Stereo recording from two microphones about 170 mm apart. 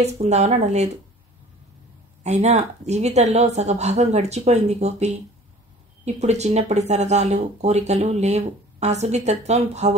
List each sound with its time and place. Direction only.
0.0 s speech: 40° right (ahead or behind)
2.2 s speech: 40° right (ahead or behind)